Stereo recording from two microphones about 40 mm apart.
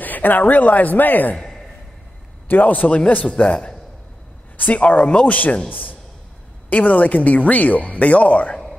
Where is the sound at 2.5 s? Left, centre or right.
Left.